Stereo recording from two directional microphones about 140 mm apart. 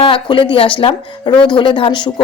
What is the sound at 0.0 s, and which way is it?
A woman's voice, 35° left (ahead or behind).